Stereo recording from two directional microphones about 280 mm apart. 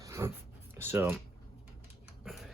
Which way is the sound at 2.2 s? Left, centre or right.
Centre.